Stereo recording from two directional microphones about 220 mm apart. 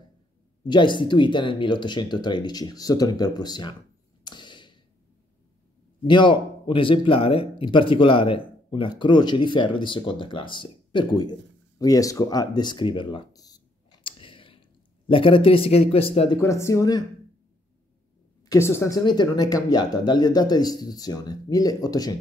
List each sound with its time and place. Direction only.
0.7 s speech: 20° left (ahead or behind)
4.2 s tap: 20° left (ahead or behind)
6.0 s speech: 20° left (ahead or behind)
11.8 s a sound: 15° left (ahead or behind)
15.0 s speech: 25° left (ahead or behind)
16.3 s speech: 10° left (ahead or behind)
18.5 s speech: 10° left (ahead or behind)